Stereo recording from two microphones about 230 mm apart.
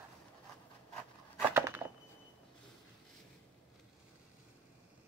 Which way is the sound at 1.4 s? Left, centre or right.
Centre.